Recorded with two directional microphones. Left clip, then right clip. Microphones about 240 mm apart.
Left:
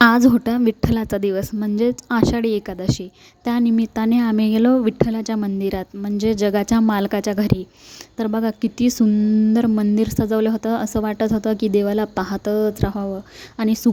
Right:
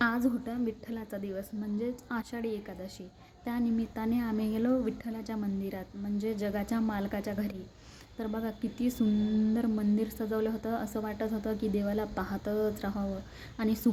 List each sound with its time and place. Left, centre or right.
0.0 s speech: left